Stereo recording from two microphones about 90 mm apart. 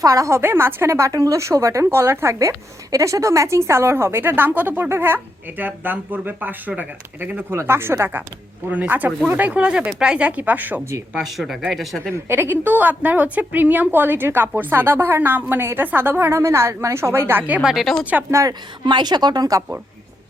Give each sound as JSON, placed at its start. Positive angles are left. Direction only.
{"t": 0.0, "sound": "speech", "side_deg": -45}
{"t": 0.3, "sound": "speech", "side_deg": -25}
{"t": 11.3, "sound": "speech", "side_deg": -5}
{"t": 12.1, "sound": "speech", "side_deg": -25}
{"t": 18.0, "sound": "speech", "side_deg": -20}
{"t": 18.3, "sound": "speech", "side_deg": -35}
{"t": 18.9, "sound": "speech", "side_deg": -55}